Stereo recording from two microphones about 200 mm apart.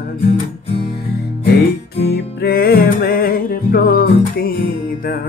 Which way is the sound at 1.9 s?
55° left (ahead or behind).